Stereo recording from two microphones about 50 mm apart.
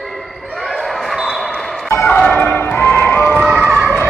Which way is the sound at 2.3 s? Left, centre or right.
Left.